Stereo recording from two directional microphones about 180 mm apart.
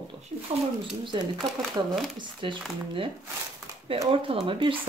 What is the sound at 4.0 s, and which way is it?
Speech, 30° right (ahead or behind).